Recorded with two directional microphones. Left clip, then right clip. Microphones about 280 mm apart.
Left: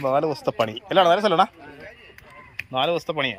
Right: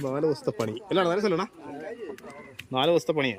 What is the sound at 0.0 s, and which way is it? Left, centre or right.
Speech, centre.